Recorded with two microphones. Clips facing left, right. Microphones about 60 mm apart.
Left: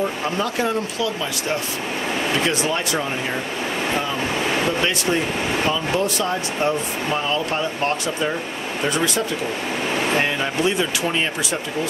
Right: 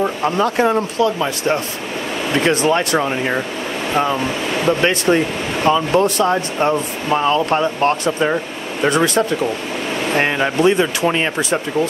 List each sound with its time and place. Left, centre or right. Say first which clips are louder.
0.4 s speech: right 7 dB; right
2.4 s speech: right 6 dB; right
5.7 s speech: right 7 dB; right
10.2 s speech: right 6 dB; right